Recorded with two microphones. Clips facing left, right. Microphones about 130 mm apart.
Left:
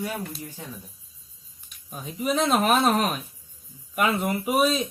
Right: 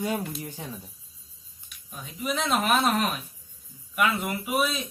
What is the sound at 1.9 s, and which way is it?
Speech, 40° left (ahead or behind).